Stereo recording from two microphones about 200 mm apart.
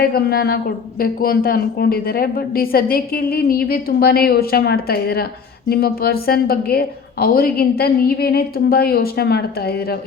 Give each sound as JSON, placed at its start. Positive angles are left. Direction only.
{"t": 0.0, "sound": "speech", "side_deg": 50}